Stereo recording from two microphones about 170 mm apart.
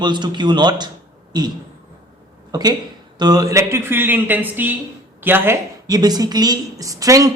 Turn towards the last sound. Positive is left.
turn(degrees=-20)  # may be behind; listen again after turning